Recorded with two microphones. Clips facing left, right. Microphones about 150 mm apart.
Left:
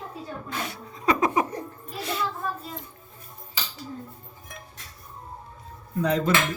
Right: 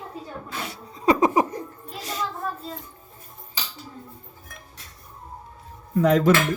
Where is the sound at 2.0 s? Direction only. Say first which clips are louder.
Left 2 dB; 40° right (ahead or behind).